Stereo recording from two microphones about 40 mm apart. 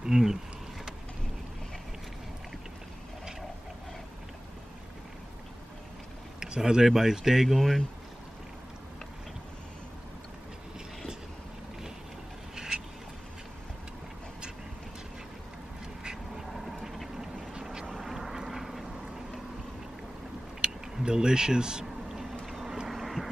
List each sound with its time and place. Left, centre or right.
0.0 s a sound: centre
6.4 s speech: centre
7.4 s speech: centre
12.5 s a sound: centre
16.0 s duck: centre
17.9 s duck: centre
20.6 s a sound: right
22.5 s vehicle: centre
22.8 s quack: centre